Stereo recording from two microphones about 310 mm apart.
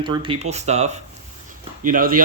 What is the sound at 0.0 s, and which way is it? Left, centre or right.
Speech, centre.